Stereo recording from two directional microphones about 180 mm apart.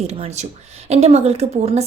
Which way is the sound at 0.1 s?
35° right (ahead or behind).